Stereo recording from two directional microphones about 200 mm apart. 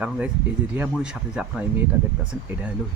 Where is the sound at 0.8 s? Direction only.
5° right (ahead or behind).